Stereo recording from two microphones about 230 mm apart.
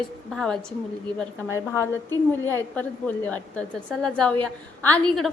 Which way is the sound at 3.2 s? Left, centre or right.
Centre.